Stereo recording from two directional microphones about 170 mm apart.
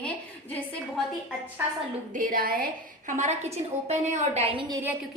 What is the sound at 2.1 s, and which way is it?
A woman's voice, 55° right (ahead or behind).